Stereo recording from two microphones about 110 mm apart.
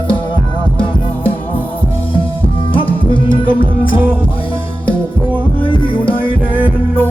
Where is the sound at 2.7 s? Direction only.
50° left (ahead or behind).